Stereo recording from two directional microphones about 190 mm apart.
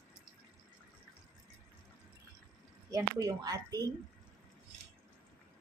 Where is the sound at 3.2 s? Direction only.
20° right (ahead or behind).